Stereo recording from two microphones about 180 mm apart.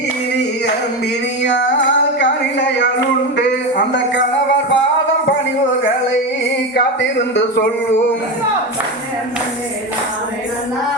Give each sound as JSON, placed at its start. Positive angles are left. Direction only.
{"t": 2.1, "sound": "a sound", "side_deg": 75}
{"t": 3.9, "sound": "music", "side_deg": 90}
{"t": 6.7, "sound": "speech", "side_deg": 80}